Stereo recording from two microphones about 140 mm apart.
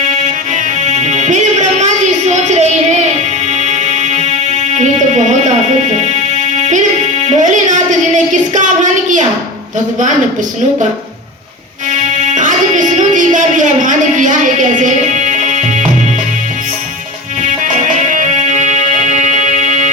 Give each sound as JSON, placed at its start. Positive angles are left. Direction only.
{"t": 0.5, "sound": "music", "side_deg": -55}
{"t": 7.3, "sound": "a sound", "side_deg": -60}
{"t": 12.3, "sound": "music", "side_deg": -60}
{"t": 17.4, "sound": "music", "side_deg": -65}